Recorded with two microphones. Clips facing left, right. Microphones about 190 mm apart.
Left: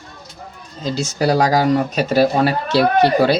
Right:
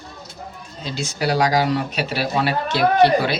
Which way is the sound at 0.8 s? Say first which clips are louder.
Left 5 dB; 40° left (ahead or behind).